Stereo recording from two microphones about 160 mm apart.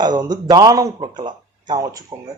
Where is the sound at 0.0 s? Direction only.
25° right (ahead or behind).